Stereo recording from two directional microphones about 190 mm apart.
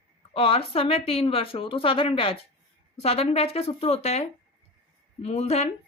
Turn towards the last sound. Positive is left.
turn(degrees=35)  # may be behind; listen again after turning